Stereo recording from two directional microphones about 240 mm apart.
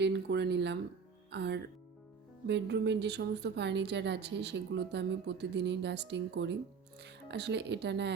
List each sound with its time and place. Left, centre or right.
0.0 s a woman's voice: right